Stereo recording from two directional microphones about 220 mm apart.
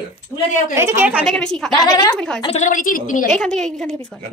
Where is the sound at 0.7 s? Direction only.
10° right (ahead or behind).